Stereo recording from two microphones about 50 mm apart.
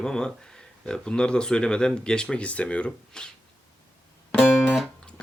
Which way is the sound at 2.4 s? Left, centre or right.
Left.